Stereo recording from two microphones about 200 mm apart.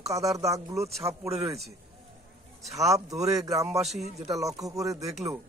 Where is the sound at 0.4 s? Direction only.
15° right (ahead or behind).